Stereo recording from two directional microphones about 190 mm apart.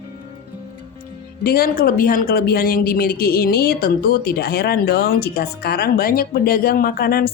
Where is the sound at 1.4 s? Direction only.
50° left (ahead or behind).